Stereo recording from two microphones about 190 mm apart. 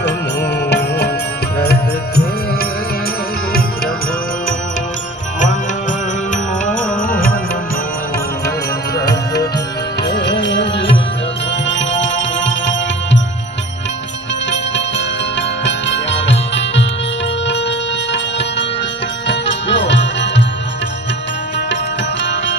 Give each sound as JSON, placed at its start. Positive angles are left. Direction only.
{"t": 0.7, "sound": "music", "side_deg": 60}
{"t": 6.3, "sound": "music", "side_deg": 45}
{"t": 10.1, "sound": "music", "side_deg": 65}
{"t": 14.5, "sound": "music", "side_deg": 70}
{"t": 22.2, "sound": "music", "side_deg": 75}